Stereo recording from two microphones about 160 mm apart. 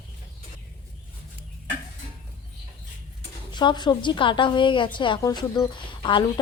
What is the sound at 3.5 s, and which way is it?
A woman's voice, 30° left (ahead or behind).